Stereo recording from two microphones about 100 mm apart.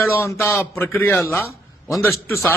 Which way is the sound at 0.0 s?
25° left (ahead or behind).